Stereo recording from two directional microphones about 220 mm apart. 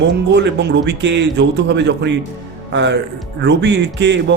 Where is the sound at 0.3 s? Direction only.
50° right (ahead or behind).